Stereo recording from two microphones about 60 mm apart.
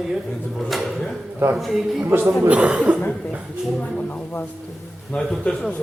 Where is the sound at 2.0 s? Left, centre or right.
Right.